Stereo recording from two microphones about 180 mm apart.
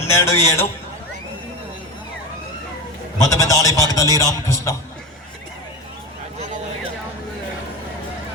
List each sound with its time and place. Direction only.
0.1 s a man's voice: 15° left (ahead or behind)
3.2 s a man's voice: 20° left (ahead or behind)